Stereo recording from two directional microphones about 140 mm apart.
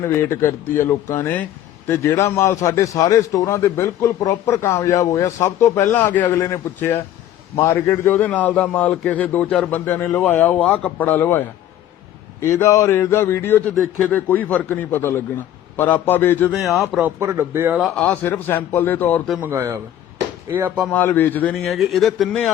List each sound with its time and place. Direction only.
0.0 s a man's voice: 20° left (ahead or behind)
13.7 s speech: centre (ahead or behind)
14.1 s a man's voice: 10° left (ahead or behind)
16.5 s speech: centre (ahead or behind)
17.0 s speech: 20° right (ahead or behind)
17.7 s speech: 5° left (ahead or behind)
18.1 s a man's voice: 20° left (ahead or behind)
19.4 s speech: 15° right (ahead or behind)
20.9 s speech: 15° left (ahead or behind)